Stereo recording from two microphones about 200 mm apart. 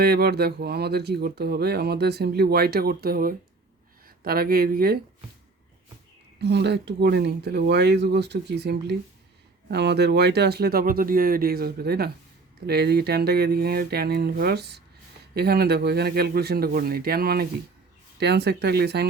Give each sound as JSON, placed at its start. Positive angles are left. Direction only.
{"t": 0.0, "sound": "speech", "side_deg": -50}
{"t": 6.4, "sound": "speech", "side_deg": -60}